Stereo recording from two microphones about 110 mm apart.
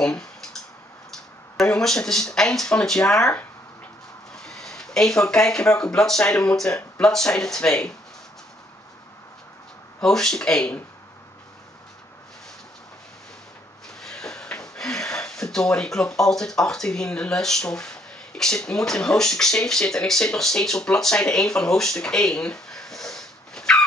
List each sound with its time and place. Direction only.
0.0 s clicking: 5° left (ahead or behind)
1.6 s speech: 5° left (ahead or behind)
4.4 s speech: 5° left (ahead or behind)
9.9 s speech: 5° left (ahead or behind)
14.0 s speech: 5° left (ahead or behind)